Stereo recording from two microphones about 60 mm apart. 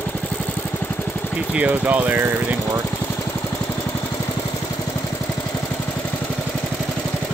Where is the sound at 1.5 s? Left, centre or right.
Right.